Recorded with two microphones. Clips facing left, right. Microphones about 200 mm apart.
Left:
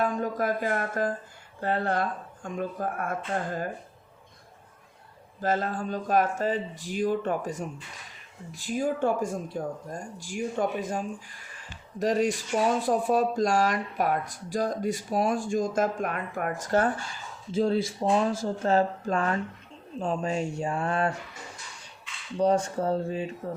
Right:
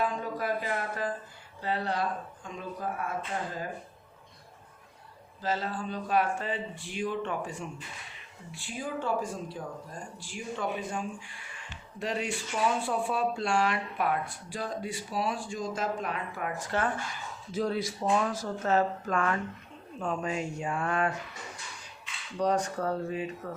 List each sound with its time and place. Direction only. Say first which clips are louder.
0.0 s speech: left 4 dB; 45° left (ahead or behind)
5.4 s speech: left 5 dB; 50° left (ahead or behind); by 21.1 s 30° left (ahead or behind)
22.4 s speech: left 4 dB; 25° left (ahead or behind)